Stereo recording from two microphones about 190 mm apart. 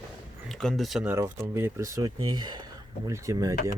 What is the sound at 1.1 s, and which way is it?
Speech, 15° right (ahead or behind).